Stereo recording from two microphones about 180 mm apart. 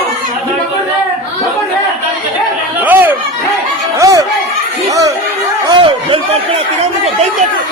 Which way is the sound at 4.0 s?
20° right (ahead or behind).